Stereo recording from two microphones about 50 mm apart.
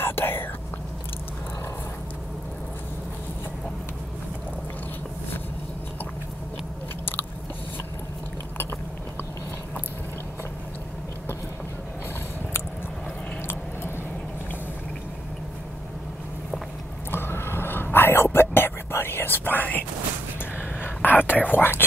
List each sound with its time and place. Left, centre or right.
0.0 s whispering: left
17.1 s whispering: left
20.5 s gasp: left
21.4 s whispering: left